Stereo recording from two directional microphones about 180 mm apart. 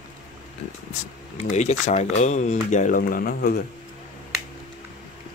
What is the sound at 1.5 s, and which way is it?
Speech, 40° left (ahead or behind).